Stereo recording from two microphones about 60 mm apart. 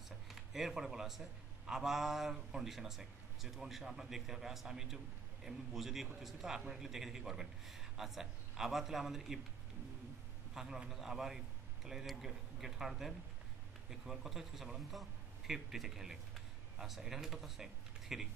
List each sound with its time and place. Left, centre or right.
0.3 s a man's voice: centre
10.5 s a man's voice: centre